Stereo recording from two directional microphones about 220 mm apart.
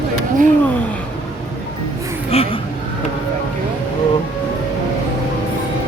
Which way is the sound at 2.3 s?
25° left (ahead or behind).